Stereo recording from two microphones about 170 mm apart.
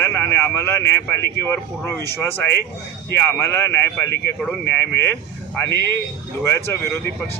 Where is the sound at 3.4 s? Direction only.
15° left (ahead or behind).